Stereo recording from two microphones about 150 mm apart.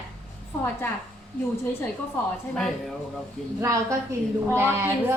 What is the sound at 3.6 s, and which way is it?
A woman's voice, 20° right (ahead or behind).